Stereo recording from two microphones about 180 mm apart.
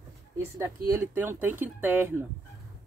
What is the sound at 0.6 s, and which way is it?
Speech, 15° right (ahead or behind).